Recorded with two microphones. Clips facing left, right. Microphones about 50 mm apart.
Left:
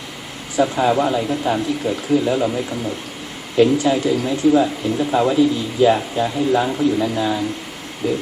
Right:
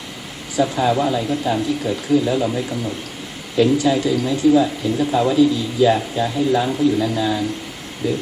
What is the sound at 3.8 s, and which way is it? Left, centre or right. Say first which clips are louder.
Speech: even; centre.